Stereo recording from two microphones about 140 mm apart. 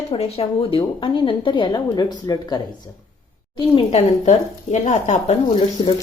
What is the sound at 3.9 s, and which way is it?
A woman's voice, 55° left (ahead or behind).